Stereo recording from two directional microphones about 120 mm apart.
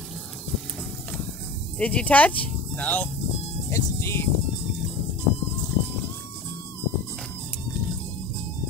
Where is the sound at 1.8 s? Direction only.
10° left (ahead or behind).